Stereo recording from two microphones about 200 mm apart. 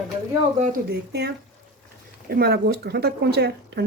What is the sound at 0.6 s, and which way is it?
Speech, 50° right (ahead or behind).